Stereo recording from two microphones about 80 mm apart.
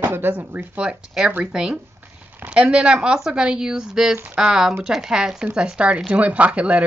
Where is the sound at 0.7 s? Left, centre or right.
Centre.